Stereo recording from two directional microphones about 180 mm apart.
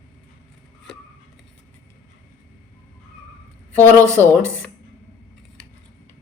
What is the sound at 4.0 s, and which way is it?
Speech, 15° right (ahead or behind).